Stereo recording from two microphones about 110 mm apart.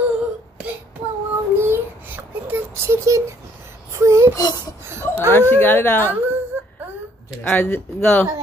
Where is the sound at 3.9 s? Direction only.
25° right (ahead or behind).